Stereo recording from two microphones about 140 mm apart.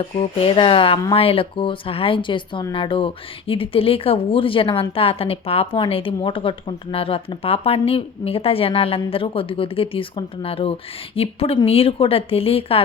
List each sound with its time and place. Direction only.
0.2 s speech: 45° left (ahead or behind)